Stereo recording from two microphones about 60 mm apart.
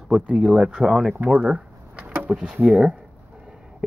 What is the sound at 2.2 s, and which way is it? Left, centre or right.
Speech, centre.